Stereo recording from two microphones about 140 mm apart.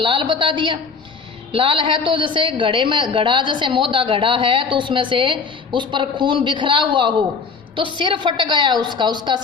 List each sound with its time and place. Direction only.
0.0 s a woman's voice: 35° right (ahead or behind)